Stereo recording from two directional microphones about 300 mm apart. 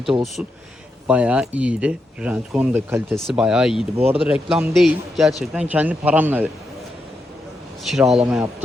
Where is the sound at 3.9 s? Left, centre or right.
Centre.